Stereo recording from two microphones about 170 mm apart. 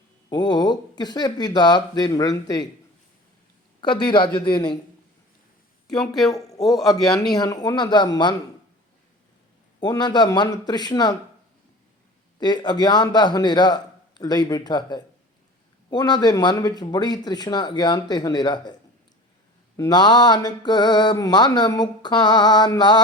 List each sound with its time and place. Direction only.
0.3 s mantra: 25° left (ahead or behind)
3.8 s mantra: 25° left (ahead or behind)
6.6 s speech: centre (ahead or behind)
7.3 s mantra: 25° left (ahead or behind)
9.8 s mantra: 25° left (ahead or behind)
12.4 s mantra: 25° left (ahead or behind)